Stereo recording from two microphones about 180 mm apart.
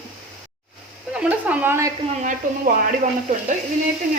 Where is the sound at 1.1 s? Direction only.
10° right (ahead or behind).